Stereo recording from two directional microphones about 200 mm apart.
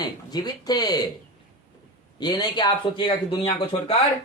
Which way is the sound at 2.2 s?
20° left (ahead or behind).